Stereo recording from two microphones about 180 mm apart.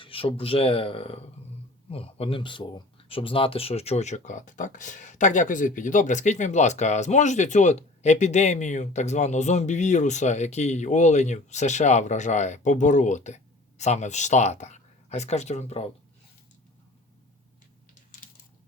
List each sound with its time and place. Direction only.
0.0 s speech: 30° left (ahead or behind)